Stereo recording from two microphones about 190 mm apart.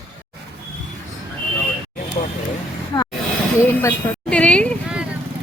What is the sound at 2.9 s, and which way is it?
A woman's voice, 20° left (ahead or behind).